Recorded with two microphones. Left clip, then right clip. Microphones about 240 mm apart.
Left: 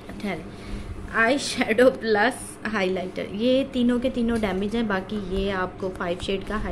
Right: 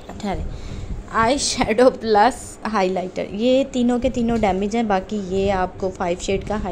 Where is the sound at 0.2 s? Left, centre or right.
Centre.